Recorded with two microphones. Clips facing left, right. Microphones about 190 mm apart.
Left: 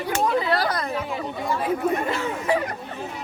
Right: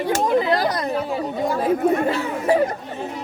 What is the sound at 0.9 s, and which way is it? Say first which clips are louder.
Speech: right 5 dB; 40° right (ahead or behind).